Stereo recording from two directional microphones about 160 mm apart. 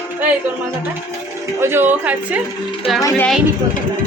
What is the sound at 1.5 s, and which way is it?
Speech, 15° right (ahead or behind).